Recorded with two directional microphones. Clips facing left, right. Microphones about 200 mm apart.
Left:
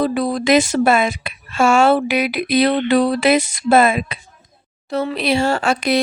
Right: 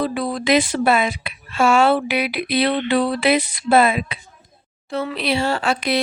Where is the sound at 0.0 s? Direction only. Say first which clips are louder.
Left 4 dB; 40° left (ahead or behind).